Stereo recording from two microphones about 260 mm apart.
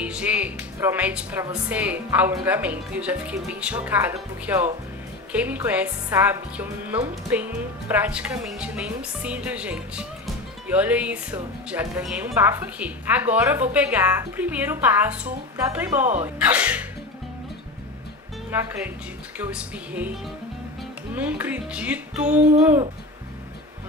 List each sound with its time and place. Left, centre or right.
0.0 s a woman's voice: centre
18.5 s a woman's voice: centre
21.1 s a woman's voice: centre